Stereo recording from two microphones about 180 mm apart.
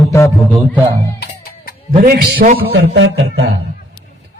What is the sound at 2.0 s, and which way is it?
A man's voice, 60° right (ahead or behind).